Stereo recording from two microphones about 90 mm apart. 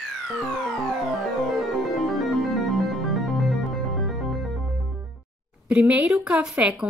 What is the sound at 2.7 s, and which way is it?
Music, centre (ahead or behind).